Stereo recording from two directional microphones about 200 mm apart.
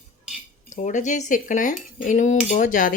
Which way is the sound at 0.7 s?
40° left (ahead or behind).